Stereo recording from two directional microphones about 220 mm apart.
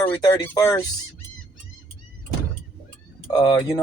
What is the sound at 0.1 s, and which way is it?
Speech, 20° left (ahead or behind).